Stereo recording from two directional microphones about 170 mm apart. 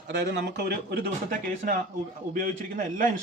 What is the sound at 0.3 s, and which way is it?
Speech, 85° right.